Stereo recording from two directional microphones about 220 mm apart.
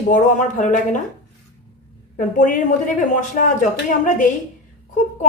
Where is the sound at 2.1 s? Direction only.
35° left (ahead or behind).